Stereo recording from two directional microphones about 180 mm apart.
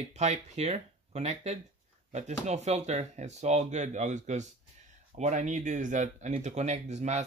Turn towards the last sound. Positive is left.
turn(degrees=-40)  # may be behind; listen again after turning